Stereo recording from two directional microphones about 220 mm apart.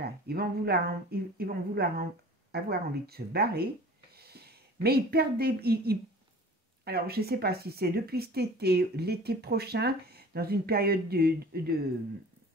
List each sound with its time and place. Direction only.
0.0 s a woman's voice: 45° right (ahead or behind)